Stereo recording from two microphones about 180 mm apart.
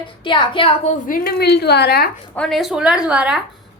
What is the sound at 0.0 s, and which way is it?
A woman's voice, 25° left (ahead or behind).